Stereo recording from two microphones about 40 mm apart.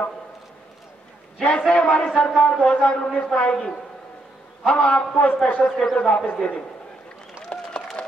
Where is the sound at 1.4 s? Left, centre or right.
Left.